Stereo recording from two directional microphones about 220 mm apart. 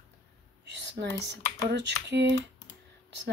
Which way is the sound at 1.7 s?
55° right (ahead or behind).